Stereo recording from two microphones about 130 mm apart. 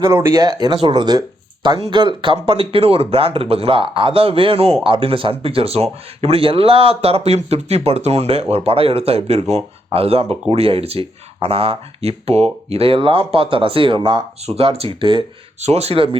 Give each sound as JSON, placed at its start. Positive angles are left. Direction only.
{"t": 0.1, "sound": "speech", "side_deg": -20}
{"t": 0.4, "sound": "speech", "side_deg": -35}
{"t": 15.6, "sound": "speech", "side_deg": -55}